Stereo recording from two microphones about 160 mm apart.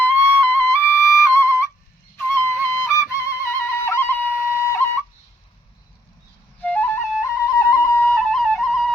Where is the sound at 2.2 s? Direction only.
15° left (ahead or behind).